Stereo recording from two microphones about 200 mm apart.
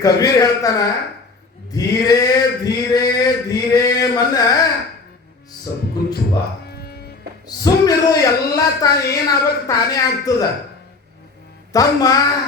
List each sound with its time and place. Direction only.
0.0 s male singing: 15° left (ahead or behind)
6.7 s music: 55° left (ahead or behind)
7.4 s male singing: 20° left (ahead or behind)
11.7 s male singing: 20° left (ahead or behind)